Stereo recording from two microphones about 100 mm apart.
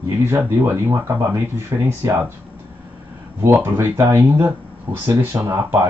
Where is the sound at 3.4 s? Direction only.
25° right (ahead or behind).